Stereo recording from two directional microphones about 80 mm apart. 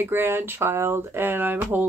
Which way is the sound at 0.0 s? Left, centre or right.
Right.